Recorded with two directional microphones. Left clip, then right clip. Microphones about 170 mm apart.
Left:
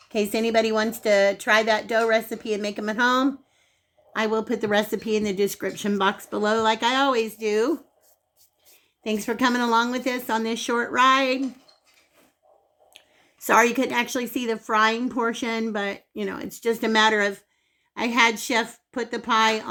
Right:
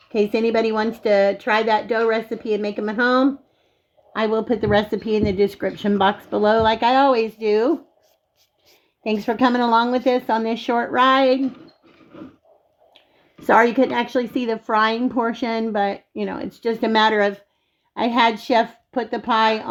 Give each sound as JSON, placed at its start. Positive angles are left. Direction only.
{"t": 0.1, "sound": "a woman's voice", "side_deg": -55}
{"t": 9.0, "sound": "a woman's voice", "side_deg": -55}
{"t": 13.5, "sound": "a woman's voice", "side_deg": -50}